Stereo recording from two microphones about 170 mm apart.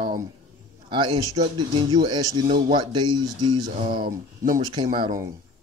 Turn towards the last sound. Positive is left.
turn(degrees=-25)  # may be behind; listen again after turning